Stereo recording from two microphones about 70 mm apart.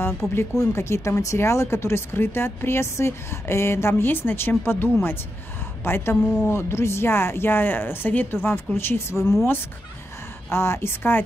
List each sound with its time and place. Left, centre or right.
0.0 s speech: left
10.5 s speech: left